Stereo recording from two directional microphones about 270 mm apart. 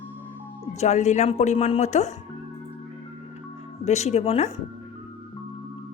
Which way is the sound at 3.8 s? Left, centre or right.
Left.